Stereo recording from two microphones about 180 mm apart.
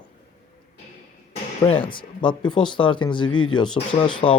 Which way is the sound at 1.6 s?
30° left (ahead or behind).